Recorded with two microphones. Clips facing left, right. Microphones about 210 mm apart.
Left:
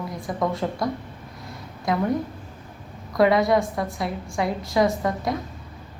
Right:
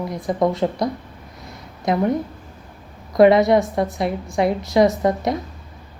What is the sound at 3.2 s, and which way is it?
A woman's voice, 25° right (ahead or behind).